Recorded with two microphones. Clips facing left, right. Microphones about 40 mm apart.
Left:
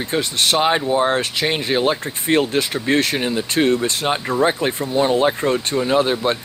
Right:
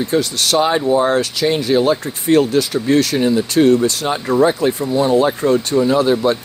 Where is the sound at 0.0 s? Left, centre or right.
Left.